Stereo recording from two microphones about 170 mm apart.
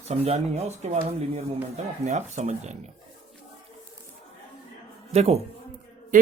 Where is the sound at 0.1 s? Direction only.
40° right (ahead or behind).